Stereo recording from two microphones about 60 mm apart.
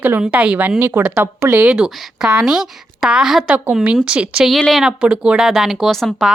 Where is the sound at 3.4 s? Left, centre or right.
Right.